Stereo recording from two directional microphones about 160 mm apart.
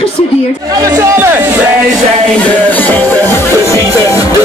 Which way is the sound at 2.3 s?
10° left (ahead or behind).